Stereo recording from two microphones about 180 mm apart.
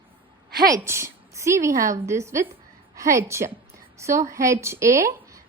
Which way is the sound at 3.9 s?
15° right (ahead or behind).